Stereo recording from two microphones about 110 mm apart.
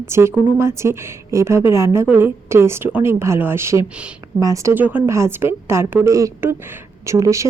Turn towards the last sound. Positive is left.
turn(degrees=-30)  # may be behind; listen again after turning